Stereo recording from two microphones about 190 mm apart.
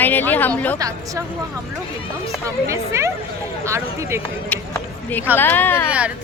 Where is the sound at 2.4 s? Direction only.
15° right (ahead or behind).